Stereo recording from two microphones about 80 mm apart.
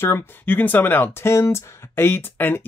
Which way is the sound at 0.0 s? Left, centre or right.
Left.